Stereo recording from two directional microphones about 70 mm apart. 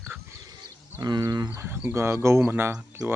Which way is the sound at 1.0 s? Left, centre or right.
Right.